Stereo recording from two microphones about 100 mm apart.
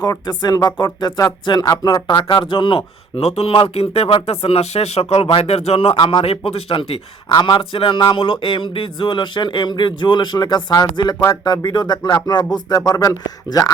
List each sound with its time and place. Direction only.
0.0 s speech: 40° left (ahead or behind)
3.2 s speech: 90° left; by 6.2 s 60° left (ahead or behind)
6.2 s speech: 85° left
7.3 s speech: 50° left (ahead or behind)
7.6 s speech: 60° left (ahead or behind); by 13.7 s 40° left (ahead or behind)